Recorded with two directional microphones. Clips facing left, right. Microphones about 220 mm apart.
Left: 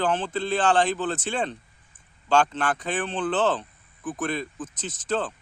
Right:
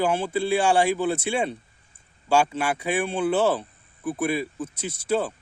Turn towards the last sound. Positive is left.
turn(degrees=-10)  # may be behind; listen again after turning